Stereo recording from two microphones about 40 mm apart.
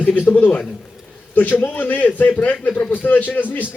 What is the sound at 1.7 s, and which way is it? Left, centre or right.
A man's voice, left.